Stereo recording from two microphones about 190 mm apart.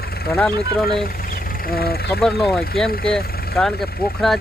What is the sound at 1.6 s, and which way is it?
Speech, 55° left (ahead or behind).